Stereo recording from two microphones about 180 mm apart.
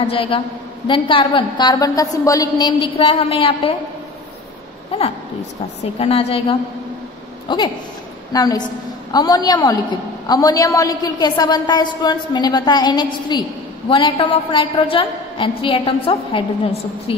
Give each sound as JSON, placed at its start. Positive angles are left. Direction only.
{"t": 0.0, "sound": "a woman's voice", "side_deg": 30}
{"t": 5.9, "sound": "a woman's voice", "side_deg": 30}
{"t": 7.4, "sound": "a woman's voice", "side_deg": 25}